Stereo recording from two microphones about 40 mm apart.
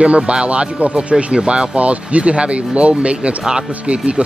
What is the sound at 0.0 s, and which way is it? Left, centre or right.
Speech, right.